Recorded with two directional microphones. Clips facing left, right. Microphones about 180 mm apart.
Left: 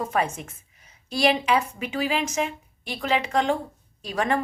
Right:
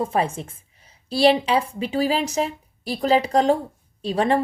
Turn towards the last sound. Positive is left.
turn(degrees=-30)  # may be behind; listen again after turning